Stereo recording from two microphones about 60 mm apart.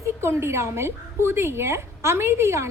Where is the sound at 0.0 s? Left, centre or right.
Right.